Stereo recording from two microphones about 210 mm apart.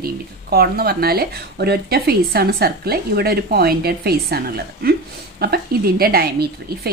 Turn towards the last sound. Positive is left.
turn(degrees=-45)  # may be behind; listen again after turning